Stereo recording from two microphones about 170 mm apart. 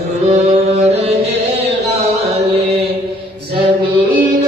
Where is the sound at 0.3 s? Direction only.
40° right (ahead or behind).